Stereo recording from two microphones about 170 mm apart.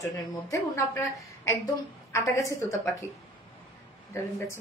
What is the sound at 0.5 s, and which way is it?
A woman's voice, 15° left (ahead or behind).